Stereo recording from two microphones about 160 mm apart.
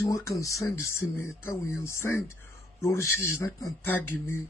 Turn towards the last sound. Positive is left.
turn(degrees=15)  # may be behind; listen again after turning